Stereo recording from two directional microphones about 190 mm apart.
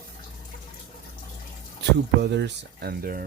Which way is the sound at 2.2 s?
65° right (ahead or behind).